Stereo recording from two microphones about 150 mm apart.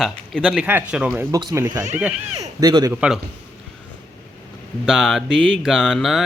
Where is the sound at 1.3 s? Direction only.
25° right (ahead or behind).